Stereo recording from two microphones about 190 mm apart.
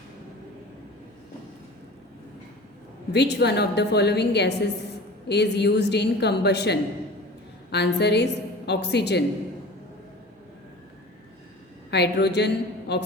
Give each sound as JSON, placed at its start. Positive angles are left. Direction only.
{"t": 3.1, "sound": "a woman's voice", "side_deg": 65}
{"t": 11.9, "sound": "a woman's voice", "side_deg": 60}